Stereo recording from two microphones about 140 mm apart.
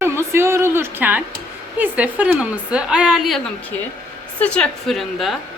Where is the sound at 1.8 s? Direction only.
10° right (ahead or behind).